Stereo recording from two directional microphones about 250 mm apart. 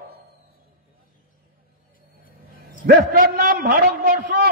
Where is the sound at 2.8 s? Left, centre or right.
Right.